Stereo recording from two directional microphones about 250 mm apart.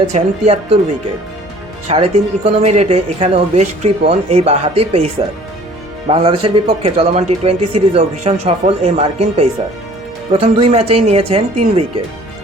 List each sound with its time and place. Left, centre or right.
0.1 s speech: right
1.9 s speech: right